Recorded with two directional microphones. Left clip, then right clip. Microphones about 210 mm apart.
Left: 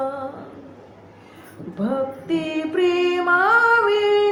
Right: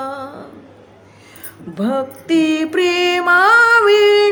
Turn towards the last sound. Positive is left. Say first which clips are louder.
# right 7 dB
turn(degrees=-55)  # may be behind; listen again after turning